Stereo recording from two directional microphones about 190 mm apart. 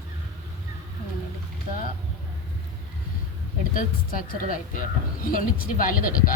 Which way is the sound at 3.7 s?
45° left (ahead or behind).